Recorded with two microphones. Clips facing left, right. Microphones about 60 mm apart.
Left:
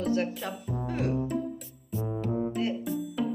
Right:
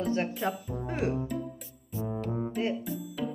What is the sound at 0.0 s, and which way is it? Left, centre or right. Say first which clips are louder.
Speech: even; right.